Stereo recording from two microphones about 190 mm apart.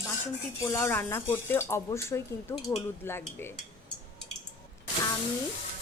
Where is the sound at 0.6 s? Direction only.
15° left (ahead or behind).